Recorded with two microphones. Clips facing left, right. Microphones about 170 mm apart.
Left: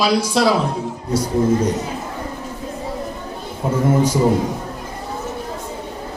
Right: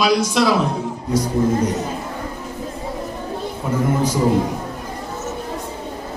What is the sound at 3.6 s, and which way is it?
Speech, 30° left (ahead or behind).